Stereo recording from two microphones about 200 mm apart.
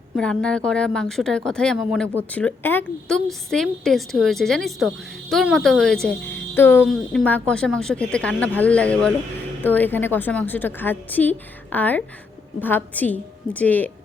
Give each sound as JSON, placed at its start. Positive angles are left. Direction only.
{"t": 0.2, "sound": "a woman's voice", "side_deg": 5}